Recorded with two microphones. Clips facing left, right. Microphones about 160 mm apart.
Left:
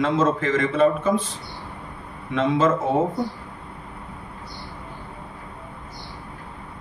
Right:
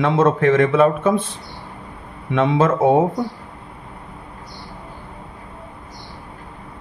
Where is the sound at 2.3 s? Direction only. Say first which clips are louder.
Right 3 dB; 60° right (ahead or behind).